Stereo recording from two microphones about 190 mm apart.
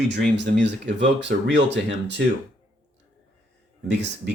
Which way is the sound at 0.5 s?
65° right (ahead or behind).